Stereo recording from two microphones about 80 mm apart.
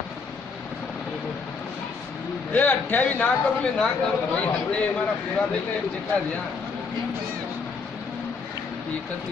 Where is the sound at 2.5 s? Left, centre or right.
Left.